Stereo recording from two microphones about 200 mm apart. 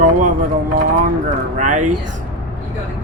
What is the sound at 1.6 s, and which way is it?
Speech, 40° right (ahead or behind).